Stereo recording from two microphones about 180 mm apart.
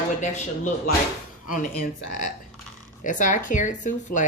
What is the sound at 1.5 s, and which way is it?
Speech, 45° left (ahead or behind).